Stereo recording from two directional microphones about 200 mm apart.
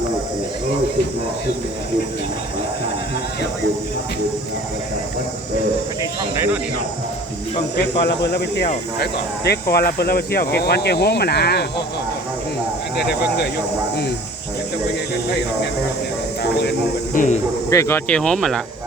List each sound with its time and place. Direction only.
7.8 s speech: 55° left (ahead or behind)
13.0 s speech: 55° left (ahead or behind)
16.4 s speech: 55° left (ahead or behind)
17.2 s speech: 35° left (ahead or behind)
17.7 s speech: 15° left (ahead or behind)